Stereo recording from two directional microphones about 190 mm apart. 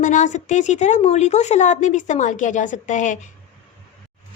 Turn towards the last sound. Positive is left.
turn(degrees=40)  # may be behind; listen again after turning